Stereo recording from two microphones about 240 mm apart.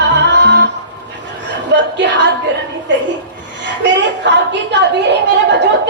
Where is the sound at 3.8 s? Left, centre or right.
Right.